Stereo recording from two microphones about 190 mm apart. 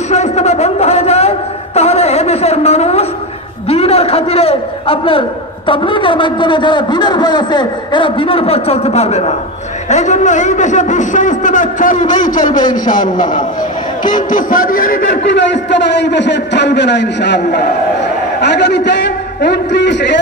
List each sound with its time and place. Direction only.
0.1 s a sound: 35° left (ahead or behind)
5.7 s a man's voice: 25° left (ahead or behind); by 15.0 s 45° left (ahead or behind)
15.2 s a man's voice: 65° left (ahead or behind)